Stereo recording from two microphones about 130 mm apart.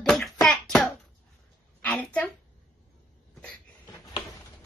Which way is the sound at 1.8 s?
10° left (ahead or behind).